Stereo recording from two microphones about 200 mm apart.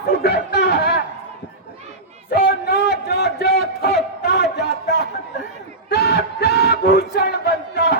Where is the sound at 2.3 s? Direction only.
50° left (ahead or behind).